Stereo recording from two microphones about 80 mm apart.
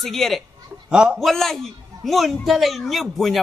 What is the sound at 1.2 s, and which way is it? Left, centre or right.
A man's voice, centre.